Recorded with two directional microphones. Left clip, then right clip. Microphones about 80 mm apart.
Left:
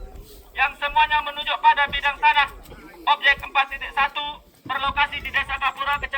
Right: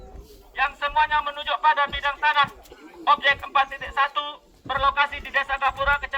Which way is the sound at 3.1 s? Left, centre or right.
Centre.